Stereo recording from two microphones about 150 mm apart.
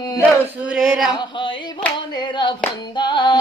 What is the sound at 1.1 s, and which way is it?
Hands, 30° left (ahead or behind).